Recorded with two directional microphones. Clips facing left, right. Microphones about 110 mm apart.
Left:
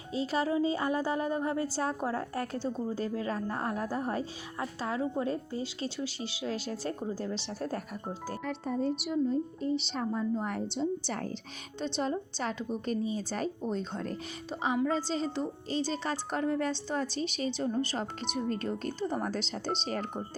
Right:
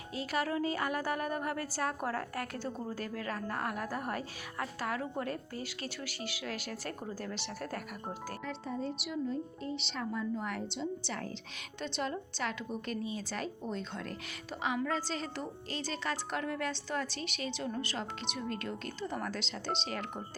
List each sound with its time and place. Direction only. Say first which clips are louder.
0.1 s a woman's voice: left 4 dB; 25° left (ahead or behind)
8.4 s a woman's voice: left 7 dB; 50° left (ahead or behind)
11.9 s a woman's voice: left 3 dB; 30° left (ahead or behind)